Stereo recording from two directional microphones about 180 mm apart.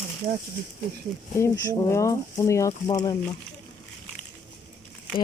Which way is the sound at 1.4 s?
15° left (ahead or behind).